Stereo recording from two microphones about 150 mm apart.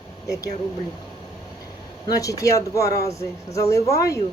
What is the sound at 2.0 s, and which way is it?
Speech, 25° left (ahead or behind).